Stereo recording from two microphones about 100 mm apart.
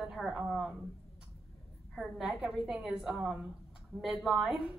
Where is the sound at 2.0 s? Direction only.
5° right (ahead or behind).